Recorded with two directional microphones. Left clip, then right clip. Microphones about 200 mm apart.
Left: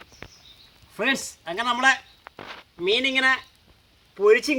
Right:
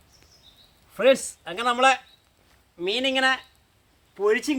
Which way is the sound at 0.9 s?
15° right (ahead or behind).